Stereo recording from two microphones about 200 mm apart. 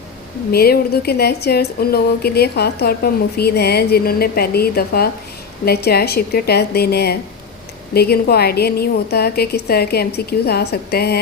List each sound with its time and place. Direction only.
0.5 s speech: 50° left (ahead or behind)